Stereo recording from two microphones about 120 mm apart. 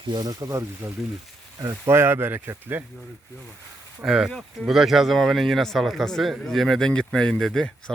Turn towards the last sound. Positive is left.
turn(degrees=5)  # may be behind; listen again after turning